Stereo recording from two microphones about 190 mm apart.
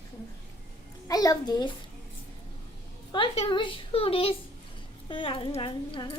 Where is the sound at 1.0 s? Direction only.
20° left (ahead or behind).